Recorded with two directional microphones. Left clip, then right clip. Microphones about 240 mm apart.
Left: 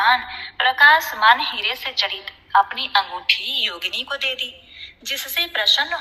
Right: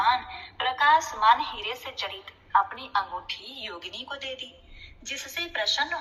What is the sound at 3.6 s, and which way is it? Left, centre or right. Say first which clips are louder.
A woman's voice: left 13 dB; left.